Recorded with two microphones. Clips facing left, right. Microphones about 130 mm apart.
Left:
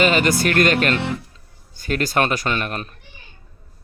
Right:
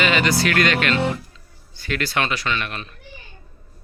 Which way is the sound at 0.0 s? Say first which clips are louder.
Left 2 dB; 45° left (ahead or behind).